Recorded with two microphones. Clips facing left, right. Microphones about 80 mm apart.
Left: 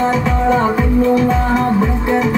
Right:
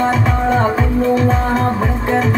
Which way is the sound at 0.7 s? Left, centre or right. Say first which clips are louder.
Left 2 dB; right.